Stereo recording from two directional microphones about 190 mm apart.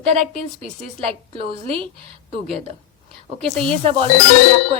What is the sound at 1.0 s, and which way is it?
A woman's voice, 30° right (ahead or behind).